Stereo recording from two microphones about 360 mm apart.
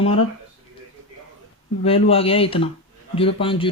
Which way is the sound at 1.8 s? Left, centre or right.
Centre.